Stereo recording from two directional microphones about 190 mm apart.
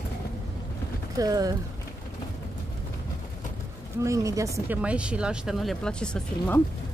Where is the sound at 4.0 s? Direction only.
15° right (ahead or behind); by 6.6 s 5° left (ahead or behind).